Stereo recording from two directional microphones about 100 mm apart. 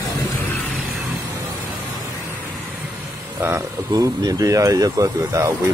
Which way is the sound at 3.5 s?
35° right (ahead or behind).